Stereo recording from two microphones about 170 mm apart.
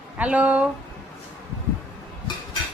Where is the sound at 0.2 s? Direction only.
10° right (ahead or behind).